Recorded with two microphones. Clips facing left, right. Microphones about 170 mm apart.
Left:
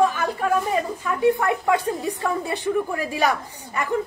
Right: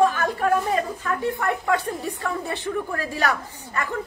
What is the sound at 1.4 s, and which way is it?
A woman's voice, 15° left (ahead or behind).